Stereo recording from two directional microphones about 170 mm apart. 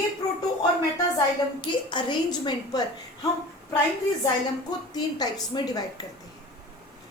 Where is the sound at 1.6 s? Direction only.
30° left (ahead or behind).